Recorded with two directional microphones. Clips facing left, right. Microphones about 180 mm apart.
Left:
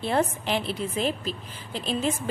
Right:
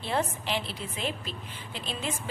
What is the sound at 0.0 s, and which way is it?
A woman's voice, 50° left (ahead or behind).